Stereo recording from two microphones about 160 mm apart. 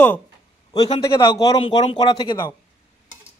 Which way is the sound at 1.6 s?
35° left (ahead or behind).